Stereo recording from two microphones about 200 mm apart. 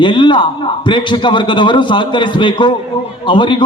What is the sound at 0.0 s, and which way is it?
A man's voice, 25° left (ahead or behind).